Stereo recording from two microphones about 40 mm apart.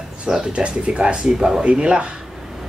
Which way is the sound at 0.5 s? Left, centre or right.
Right.